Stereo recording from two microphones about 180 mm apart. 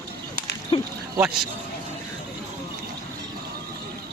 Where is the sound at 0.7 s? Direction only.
30° left (ahead or behind).